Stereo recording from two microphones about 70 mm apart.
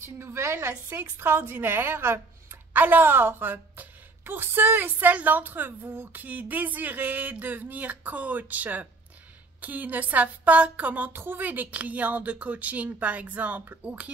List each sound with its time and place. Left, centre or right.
0.0 s a woman's voice: right; by 14.1 s centre